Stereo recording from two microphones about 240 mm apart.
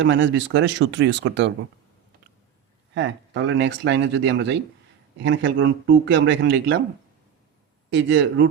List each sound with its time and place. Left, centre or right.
0.0 s speech: right
2.9 s speech: right
7.9 s speech: right